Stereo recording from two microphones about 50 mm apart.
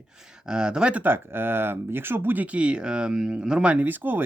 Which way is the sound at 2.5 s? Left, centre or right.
Right.